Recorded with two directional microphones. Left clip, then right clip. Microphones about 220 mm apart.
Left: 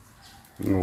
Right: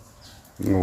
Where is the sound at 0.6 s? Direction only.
Centre (ahead or behind).